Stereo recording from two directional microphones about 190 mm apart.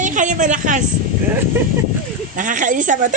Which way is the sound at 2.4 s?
45° right (ahead or behind).